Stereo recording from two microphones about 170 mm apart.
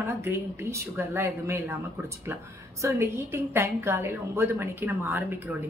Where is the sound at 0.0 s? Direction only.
15° right (ahead or behind).